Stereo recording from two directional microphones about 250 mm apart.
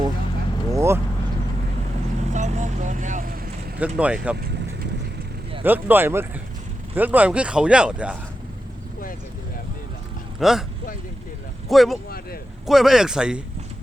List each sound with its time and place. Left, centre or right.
0.7 s vehicle: centre
2.3 s vehicle: right
3.8 s speech: centre
5.6 s speech: centre
10.4 s speech: centre
11.7 s speech: centre